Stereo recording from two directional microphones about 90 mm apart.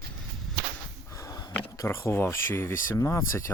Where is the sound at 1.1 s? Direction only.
40° left (ahead or behind).